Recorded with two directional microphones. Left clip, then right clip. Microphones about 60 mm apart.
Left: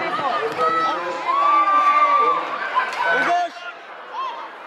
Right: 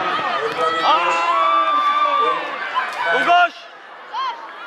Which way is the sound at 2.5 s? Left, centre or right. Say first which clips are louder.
Left 1 dB; centre.